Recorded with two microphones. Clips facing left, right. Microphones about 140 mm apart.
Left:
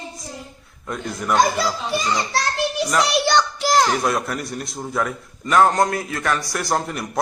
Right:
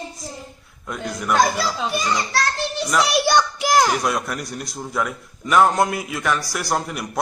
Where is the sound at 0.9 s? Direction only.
Centre (ahead or behind).